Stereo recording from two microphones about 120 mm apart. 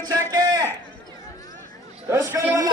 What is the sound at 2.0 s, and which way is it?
Speech, 25° right (ahead or behind).